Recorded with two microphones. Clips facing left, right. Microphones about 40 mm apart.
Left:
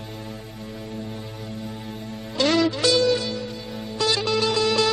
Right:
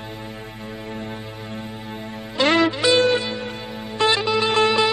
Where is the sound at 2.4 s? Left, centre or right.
Right.